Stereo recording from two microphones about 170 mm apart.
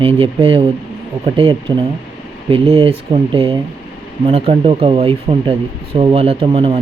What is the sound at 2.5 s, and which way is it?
Speech, 35° right (ahead or behind).